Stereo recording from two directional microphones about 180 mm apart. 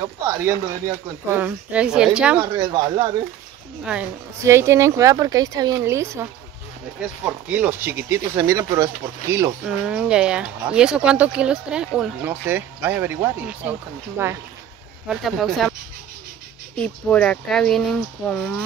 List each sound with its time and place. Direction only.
0.0 s speech: 15° right (ahead or behind)
2.5 s speech: 25° right (ahead or behind)
3.8 s speech: 5° right (ahead or behind)
9.7 s speech: 5° right (ahead or behind)
15.0 s speech: centre (ahead or behind)
16.7 s speech: 5° left (ahead or behind)